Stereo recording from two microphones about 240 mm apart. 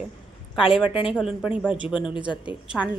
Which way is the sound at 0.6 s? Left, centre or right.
Centre.